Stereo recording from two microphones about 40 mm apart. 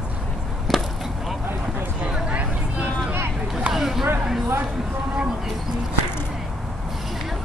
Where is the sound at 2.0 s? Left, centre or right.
Right.